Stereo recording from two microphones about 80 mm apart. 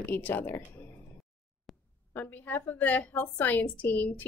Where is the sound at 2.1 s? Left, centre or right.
Left.